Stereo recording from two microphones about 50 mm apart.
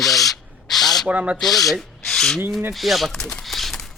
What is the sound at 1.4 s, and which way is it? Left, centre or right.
Speech, centre.